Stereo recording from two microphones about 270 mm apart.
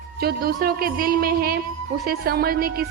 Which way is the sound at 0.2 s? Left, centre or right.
Right.